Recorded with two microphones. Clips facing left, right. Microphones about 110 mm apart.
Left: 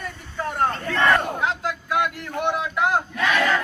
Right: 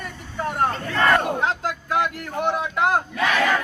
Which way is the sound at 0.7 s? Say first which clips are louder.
Even; 5° right (ahead or behind).